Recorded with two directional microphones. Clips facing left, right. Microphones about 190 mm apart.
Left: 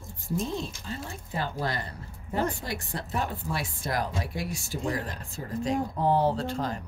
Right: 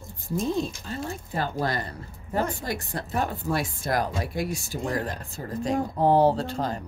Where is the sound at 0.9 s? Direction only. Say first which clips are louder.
Right 4 dB; 45° right (ahead or behind).